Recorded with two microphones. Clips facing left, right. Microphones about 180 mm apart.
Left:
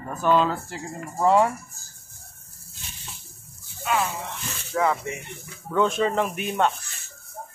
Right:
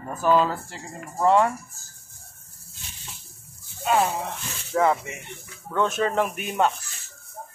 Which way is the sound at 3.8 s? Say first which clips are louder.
Right 3 dB; 45° right (ahead or behind).